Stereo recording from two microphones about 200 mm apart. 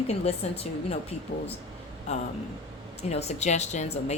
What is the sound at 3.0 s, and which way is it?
Speech, 30° left (ahead or behind).